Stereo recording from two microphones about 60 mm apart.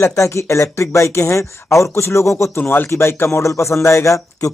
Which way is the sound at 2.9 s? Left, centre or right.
Left.